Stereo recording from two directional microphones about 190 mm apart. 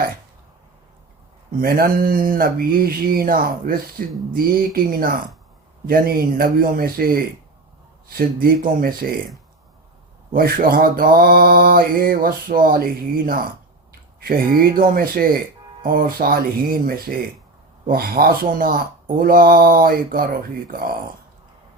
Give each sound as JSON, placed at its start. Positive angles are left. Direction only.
{"t": 1.6, "sound": "mantra", "side_deg": -50}
{"t": 10.3, "sound": "mantra", "side_deg": -50}